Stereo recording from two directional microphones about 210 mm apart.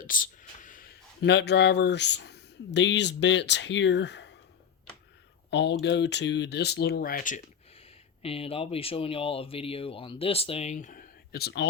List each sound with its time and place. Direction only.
0.0 s speech: 40° left (ahead or behind); by 4.4 s 55° left (ahead or behind)
5.5 s speech: 55° left (ahead or behind)